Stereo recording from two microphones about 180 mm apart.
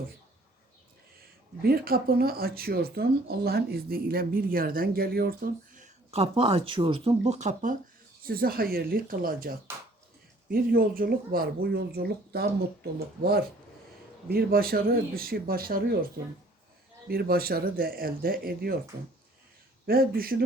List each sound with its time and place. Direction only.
1.6 s speech: 55° right (ahead or behind)
8.3 s speech: 55° right (ahead or behind)
17.1 s speech: 60° right (ahead or behind)
19.9 s speech: 55° right (ahead or behind)